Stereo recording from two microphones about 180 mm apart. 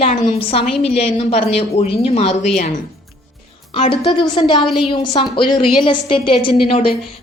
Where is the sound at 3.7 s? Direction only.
30° left (ahead or behind).